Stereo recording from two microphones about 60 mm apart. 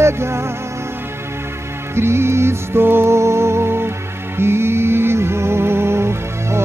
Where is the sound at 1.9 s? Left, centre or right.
Right.